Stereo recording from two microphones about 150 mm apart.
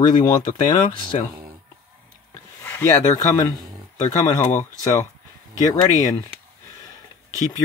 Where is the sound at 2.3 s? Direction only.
15° left (ahead or behind).